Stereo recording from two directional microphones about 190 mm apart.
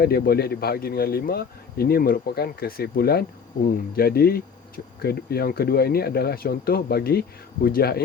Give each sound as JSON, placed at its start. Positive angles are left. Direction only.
{"t": 0.0, "sound": "speech", "side_deg": 55}